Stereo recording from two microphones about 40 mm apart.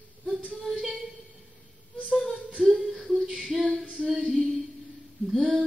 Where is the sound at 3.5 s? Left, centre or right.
Centre.